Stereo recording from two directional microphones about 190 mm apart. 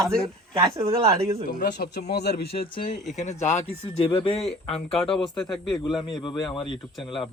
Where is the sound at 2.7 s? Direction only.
45° left (ahead or behind).